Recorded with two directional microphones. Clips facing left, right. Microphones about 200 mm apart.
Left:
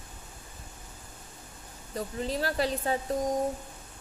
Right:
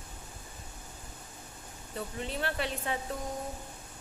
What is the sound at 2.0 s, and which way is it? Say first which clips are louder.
A woman's voice: left 4 dB; 35° left (ahead or behind).